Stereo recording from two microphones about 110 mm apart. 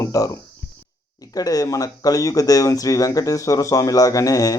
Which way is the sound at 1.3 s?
35° left (ahead or behind).